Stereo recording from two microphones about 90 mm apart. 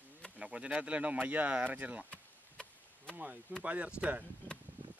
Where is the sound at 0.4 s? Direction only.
10° right (ahead or behind).